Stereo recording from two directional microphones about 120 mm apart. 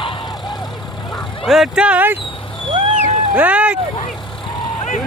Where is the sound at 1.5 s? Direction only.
5° right (ahead or behind).